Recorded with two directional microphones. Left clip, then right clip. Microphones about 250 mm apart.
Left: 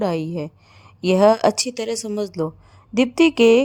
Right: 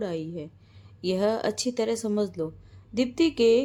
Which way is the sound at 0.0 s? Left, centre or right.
Left.